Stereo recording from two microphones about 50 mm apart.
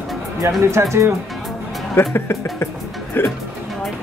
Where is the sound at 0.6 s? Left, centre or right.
Right.